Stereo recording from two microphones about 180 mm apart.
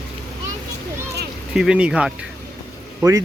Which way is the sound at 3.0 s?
15° right (ahead or behind).